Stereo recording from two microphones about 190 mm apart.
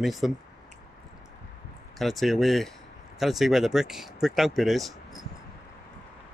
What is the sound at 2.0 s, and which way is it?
Speech, centre (ahead or behind).